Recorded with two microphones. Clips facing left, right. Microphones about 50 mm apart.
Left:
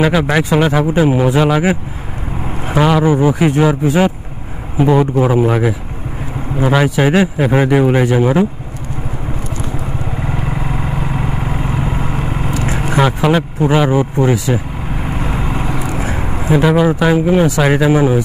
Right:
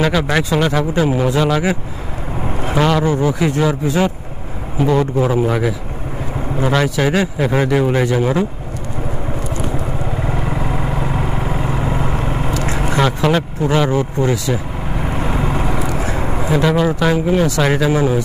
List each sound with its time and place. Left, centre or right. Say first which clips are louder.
0.0 s speech: left 3 dB; centre
10.1 s vehicle: even; centre
12.9 s speech: left 3 dB; centre
14.9 s vehicle: right 1 dB; centre
15.9 s a sound: even; centre
16.4 s speech: left 4 dB; centre